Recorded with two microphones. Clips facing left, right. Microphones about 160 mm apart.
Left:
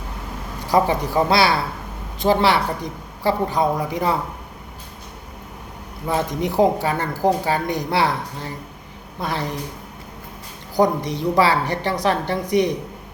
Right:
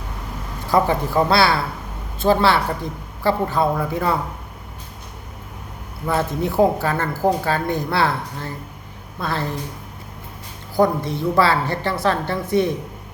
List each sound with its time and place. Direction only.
0.7 s speech: 15° left (ahead or behind)
6.1 s speech: 15° left (ahead or behind)
10.8 s speech: 15° left (ahead or behind)